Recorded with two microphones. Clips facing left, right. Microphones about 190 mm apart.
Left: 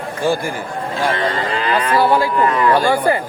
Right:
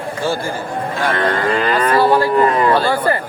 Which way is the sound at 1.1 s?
60° right (ahead or behind).